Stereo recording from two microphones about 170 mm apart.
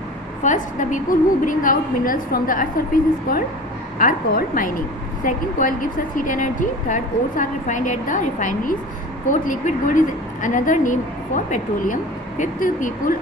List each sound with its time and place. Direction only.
0.4 s a woman's voice: 45° left (ahead or behind)